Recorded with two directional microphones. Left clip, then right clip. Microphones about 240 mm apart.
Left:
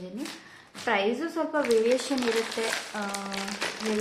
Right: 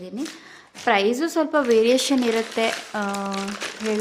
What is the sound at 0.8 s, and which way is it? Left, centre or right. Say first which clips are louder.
Speech: right 7 dB; right.